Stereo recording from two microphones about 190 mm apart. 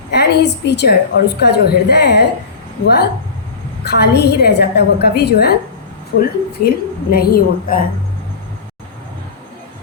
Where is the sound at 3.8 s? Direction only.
60° left (ahead or behind).